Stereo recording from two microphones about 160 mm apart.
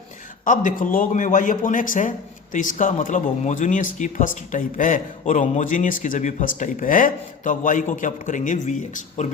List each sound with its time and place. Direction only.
0.4 s speech: 55° left (ahead or behind)